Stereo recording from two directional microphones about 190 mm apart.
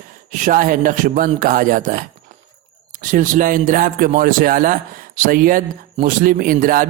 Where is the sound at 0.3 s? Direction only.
45° right (ahead or behind).